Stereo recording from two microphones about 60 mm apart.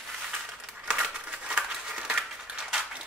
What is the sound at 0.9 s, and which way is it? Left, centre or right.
Crumpling, centre.